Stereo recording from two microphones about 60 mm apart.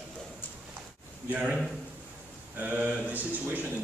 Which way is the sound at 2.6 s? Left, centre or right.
Right.